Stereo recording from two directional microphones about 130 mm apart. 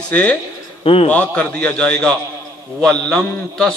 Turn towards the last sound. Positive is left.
turn(degrees=5)  # may be behind; listen again after turning